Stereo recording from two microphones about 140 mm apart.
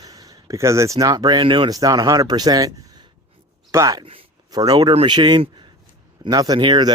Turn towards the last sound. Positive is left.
turn(degrees=-35)  # may be behind; listen again after turning